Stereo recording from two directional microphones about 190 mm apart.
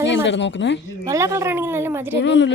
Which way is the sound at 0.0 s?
70° left (ahead or behind).